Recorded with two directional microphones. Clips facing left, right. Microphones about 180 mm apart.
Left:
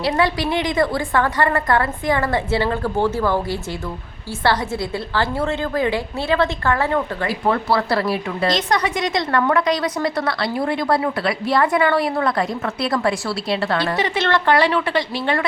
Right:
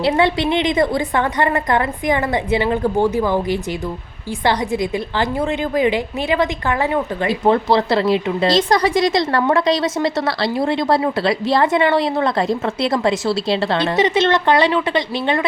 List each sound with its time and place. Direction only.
0.0 s a woman's voice: 25° right (ahead or behind)